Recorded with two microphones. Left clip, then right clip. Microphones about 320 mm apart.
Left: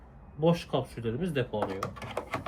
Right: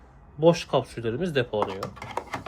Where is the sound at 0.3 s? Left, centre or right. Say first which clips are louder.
Right 7 dB; centre.